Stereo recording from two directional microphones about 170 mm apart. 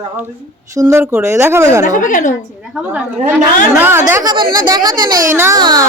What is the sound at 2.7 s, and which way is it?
A woman's voice, 5° right (ahead or behind).